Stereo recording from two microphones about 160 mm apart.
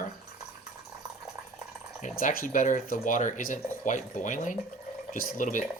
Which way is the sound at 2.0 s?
50° left (ahead or behind).